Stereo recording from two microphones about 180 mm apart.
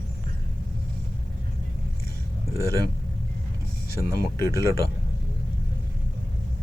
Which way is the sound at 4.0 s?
65° left (ahead or behind).